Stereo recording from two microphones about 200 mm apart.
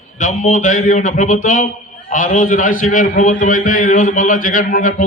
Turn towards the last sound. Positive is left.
turn(degrees=45)  # may be behind; listen again after turning